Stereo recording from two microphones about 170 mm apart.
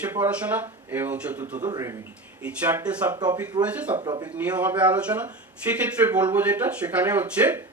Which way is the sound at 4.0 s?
25° right (ahead or behind).